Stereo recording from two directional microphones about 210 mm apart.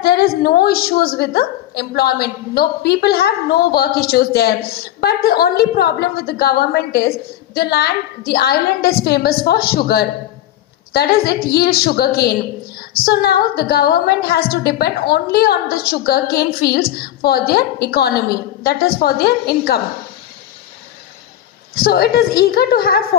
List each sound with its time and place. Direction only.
0.0 s a woman's voice: 50° left (ahead or behind)
21.8 s a woman's voice: 45° left (ahead or behind)